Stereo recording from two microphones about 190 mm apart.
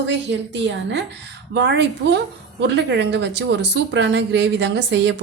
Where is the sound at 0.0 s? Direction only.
65° right (ahead or behind).